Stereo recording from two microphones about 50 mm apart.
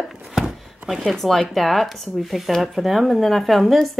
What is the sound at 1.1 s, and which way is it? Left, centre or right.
Speech, centre.